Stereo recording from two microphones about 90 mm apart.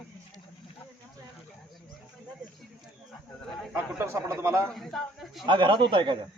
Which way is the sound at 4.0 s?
35° right (ahead or behind).